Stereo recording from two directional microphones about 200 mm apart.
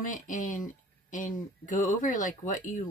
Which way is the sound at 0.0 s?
40° left (ahead or behind).